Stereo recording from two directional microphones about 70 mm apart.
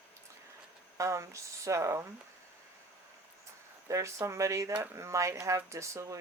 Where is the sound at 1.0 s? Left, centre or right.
Right.